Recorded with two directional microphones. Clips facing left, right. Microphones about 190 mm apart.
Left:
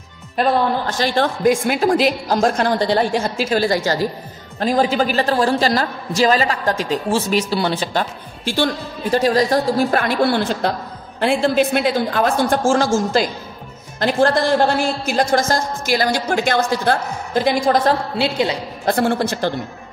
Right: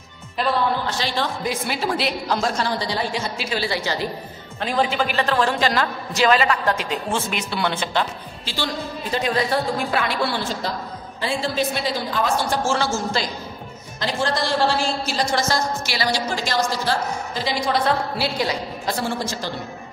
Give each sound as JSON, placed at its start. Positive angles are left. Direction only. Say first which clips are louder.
{"t": 0.4, "sound": "a woman's voice", "louder": "left 4 dB", "side_deg": 50}
{"t": 13.9, "sound": "a woman's voice", "louder": "left 8 dB", "side_deg": 55}
{"t": 18.1, "sound": "a woman's voice", "louder": "left 5 dB", "side_deg": 20}
{"t": 18.9, "sound": "a woman's voice", "louder": "left 8 dB", "side_deg": 60}